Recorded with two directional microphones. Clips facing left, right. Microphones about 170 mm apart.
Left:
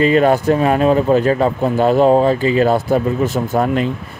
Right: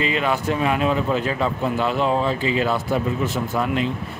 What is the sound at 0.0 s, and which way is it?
Speech, 45° left (ahead or behind).